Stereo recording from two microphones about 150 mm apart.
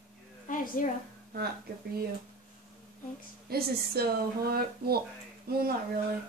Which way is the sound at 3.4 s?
90° right.